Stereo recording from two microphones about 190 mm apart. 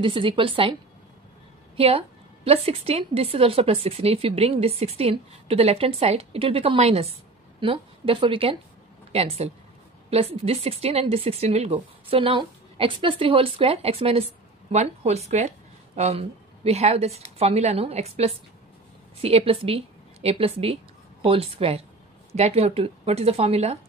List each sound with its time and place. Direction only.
0.0 s a woman's voice: 25° right (ahead or behind)
1.8 s a woman's voice: 30° right (ahead or behind)